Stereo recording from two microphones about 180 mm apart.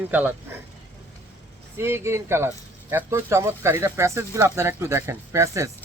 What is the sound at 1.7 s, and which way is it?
Speech, 15° right (ahead or behind).